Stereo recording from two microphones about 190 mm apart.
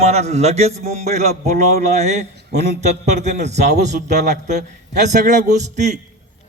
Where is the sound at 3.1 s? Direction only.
35° right (ahead or behind).